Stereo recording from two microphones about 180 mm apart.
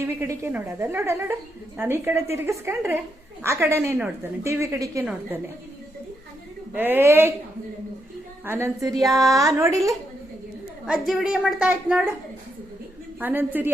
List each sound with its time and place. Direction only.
0.0 s a woman's voice: 15° right (ahead or behind)
6.7 s a woman's voice: 10° right (ahead or behind)
8.4 s a woman's voice: 15° right (ahead or behind)
10.8 s a woman's voice: 5° right (ahead or behind)
13.1 s a woman's voice: 10° right (ahead or behind)